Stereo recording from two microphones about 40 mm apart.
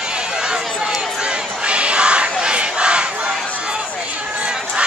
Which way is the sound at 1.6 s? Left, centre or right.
Right.